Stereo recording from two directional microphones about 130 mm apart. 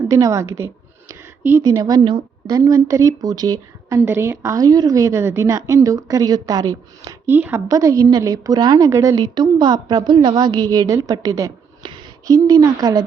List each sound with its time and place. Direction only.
0.1 s a sound: 25° right (ahead or behind)
1.6 s a woman's voice: 30° right (ahead or behind)
4.0 s a woman's voice: 15° right (ahead or behind)
7.3 s a woman's voice: 15° right (ahead or behind)
7.7 s a woman's voice: 30° right (ahead or behind)
11.8 s a sound: 35° right (ahead or behind)
12.4 s a woman's voice: 25° right (ahead or behind)